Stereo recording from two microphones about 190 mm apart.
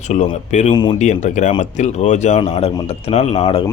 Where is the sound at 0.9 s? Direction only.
40° left (ahead or behind).